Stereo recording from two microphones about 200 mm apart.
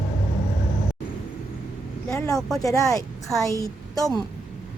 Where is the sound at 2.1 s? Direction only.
15° left (ahead or behind).